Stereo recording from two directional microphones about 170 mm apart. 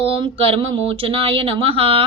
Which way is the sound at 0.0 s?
30° right (ahead or behind).